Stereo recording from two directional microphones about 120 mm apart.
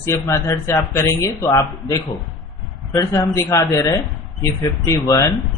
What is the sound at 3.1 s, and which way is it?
Speech, 25° left (ahead or behind).